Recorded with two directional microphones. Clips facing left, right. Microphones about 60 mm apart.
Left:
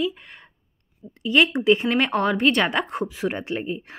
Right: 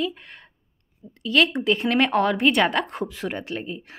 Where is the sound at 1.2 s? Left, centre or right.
Centre.